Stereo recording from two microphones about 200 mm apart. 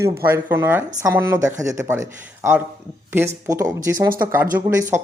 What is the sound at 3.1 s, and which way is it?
Speech, 15° right (ahead or behind).